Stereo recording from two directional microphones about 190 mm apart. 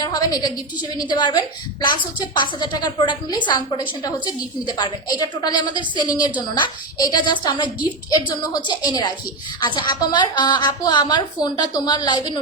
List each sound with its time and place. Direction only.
0.0 s a woman's voice: 20° left (ahead or behind)